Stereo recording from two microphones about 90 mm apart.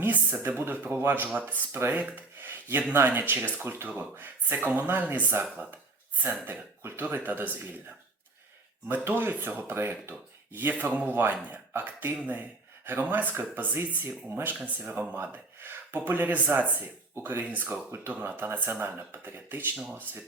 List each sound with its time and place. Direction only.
0.0 s speech: 20° right (ahead or behind)
8.9 s speech: 20° right (ahead or behind)